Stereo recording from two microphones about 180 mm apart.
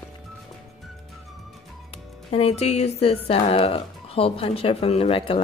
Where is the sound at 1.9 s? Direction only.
35° left (ahead or behind).